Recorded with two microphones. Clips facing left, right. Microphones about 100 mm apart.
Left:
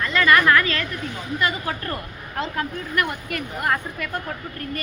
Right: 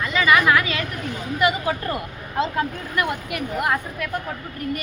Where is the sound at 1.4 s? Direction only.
15° right (ahead or behind).